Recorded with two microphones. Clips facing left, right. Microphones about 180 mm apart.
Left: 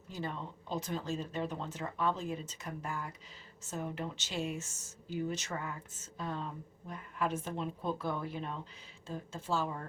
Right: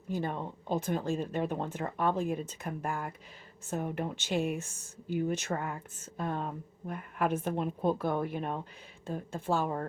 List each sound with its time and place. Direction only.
0.1 s speech: 55° right (ahead or behind)